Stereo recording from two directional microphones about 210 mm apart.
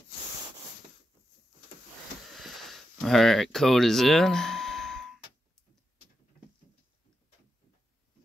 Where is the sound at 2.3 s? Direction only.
Centre (ahead or behind).